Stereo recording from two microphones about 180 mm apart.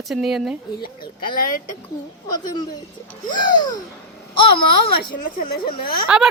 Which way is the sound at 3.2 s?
25° left (ahead or behind).